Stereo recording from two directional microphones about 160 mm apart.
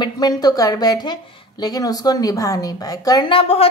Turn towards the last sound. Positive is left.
turn(degrees=40)  # may be behind; listen again after turning